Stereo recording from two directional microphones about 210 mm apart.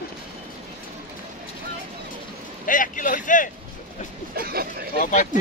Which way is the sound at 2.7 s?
40° left (ahead or behind).